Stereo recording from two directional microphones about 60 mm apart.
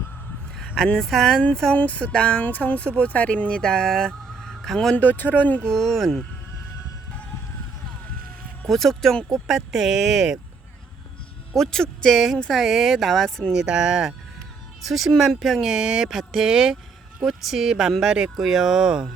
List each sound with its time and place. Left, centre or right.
0.9 s speech: centre
1.7 s speech: left
3.6 s speech: centre
4.9 s speech: left
5.6 s speech: centre
8.6 s speech: centre
11.5 s speech: centre
13.5 s speech: centre